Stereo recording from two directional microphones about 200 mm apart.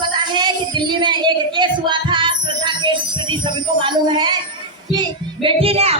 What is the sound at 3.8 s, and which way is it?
Speech, 20° right (ahead or behind).